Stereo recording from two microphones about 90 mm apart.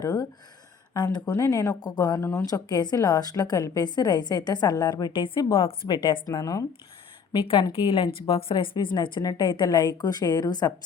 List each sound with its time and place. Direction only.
0.0 s a woman's voice: 45° left (ahead or behind)
1.2 s a woman's voice: 35° left (ahead or behind)
5.4 s speech: 40° left (ahead or behind)
7.3 s a woman's voice: 90° left
7.7 s a woman's voice: 75° left (ahead or behind); by 10.7 s 50° left (ahead or behind)